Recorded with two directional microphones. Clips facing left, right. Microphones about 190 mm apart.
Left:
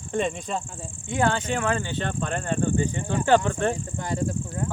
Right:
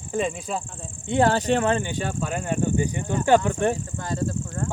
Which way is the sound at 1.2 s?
35° right (ahead or behind).